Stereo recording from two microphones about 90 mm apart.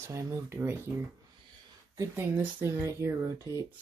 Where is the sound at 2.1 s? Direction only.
30° right (ahead or behind).